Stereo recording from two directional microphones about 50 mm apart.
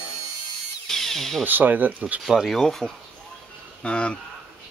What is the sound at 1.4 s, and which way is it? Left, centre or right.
Speech, right.